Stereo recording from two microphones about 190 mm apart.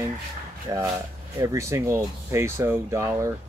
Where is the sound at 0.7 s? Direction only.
20° right (ahead or behind).